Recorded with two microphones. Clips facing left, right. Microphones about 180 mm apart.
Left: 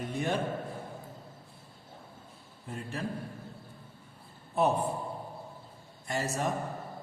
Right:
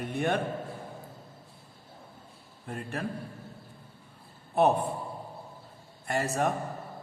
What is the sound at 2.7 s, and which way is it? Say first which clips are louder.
Speech: right 3 dB; 60° right (ahead or behind).